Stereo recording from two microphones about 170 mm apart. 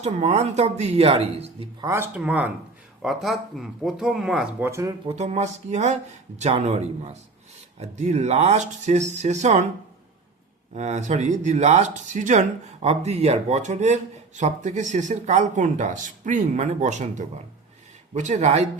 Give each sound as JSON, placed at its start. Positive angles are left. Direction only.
{"t": 0.0, "sound": "speech", "side_deg": -40}
{"t": 1.8, "sound": "speech", "side_deg": -15}
{"t": 4.7, "sound": "speech", "side_deg": -20}
{"t": 5.0, "sound": "speech", "side_deg": -40}
{"t": 10.8, "sound": "speech", "side_deg": -40}